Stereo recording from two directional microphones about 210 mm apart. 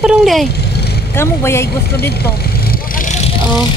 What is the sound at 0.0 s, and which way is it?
Speech, 5° right (ahead or behind).